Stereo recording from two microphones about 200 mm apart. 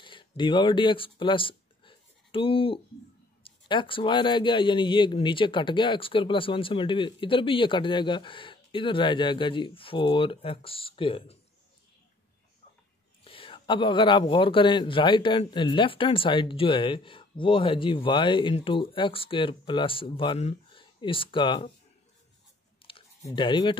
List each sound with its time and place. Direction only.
0.0 s a sound: 25° left (ahead or behind)
0.4 s speech: 25° left (ahead or behind)
13.2 s speech: 25° left (ahead or behind)
23.2 s speech: 25° left (ahead or behind)